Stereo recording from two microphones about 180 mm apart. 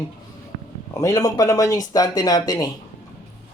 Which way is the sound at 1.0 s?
15° left (ahead or behind).